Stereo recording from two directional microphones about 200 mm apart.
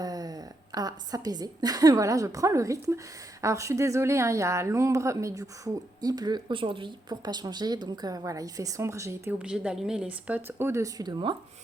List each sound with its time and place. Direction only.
0.0 s a woman's voice: 20° right (ahead or behind)